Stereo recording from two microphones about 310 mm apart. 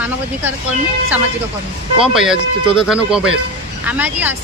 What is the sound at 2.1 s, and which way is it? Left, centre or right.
Speech, centre.